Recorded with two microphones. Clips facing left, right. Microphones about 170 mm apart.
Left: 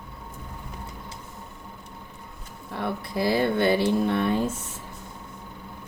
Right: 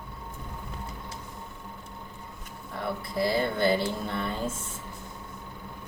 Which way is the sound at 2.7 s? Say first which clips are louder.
Left 2 dB; 65° left (ahead or behind).